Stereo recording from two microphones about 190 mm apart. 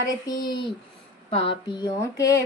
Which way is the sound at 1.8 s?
15° left (ahead or behind).